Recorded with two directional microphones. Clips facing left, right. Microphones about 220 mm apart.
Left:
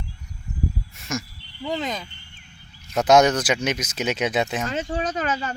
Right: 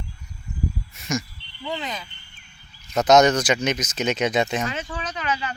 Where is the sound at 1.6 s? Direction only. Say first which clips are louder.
Left 3 dB; 40° left (ahead or behind).